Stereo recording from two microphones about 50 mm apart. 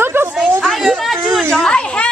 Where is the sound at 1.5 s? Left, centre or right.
Centre.